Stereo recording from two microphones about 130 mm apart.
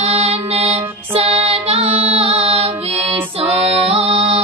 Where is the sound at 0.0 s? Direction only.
55° right (ahead or behind).